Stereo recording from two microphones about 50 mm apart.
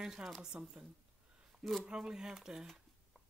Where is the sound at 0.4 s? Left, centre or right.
Centre.